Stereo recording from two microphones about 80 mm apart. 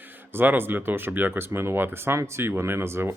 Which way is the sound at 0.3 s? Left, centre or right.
Right.